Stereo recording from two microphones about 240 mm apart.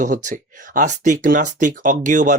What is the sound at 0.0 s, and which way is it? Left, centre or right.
Speech, right.